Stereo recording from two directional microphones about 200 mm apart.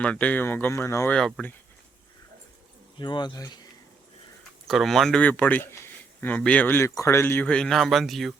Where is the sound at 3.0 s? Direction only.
20° left (ahead or behind).